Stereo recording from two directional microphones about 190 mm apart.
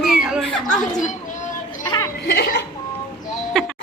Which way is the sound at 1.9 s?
20° left (ahead or behind).